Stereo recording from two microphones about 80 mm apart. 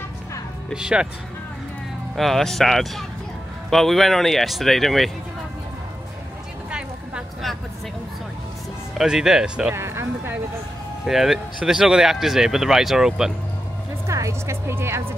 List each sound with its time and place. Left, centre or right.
0.7 s speech: centre
2.1 s speech: centre
8.9 s speech: centre
9.8 s music: right
11.1 s speech: centre
14.0 s a woman's voice: right